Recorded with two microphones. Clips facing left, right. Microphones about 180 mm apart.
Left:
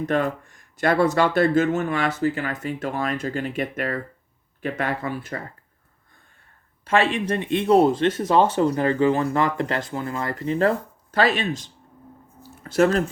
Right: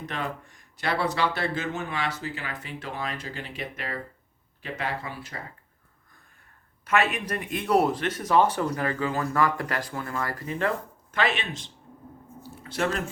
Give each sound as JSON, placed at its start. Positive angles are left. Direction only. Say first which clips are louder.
{"t": 0.0, "sound": "speech", "louder": "left 10 dB", "side_deg": 50}
{"t": 6.8, "sound": "speech", "louder": "left 4 dB", "side_deg": 30}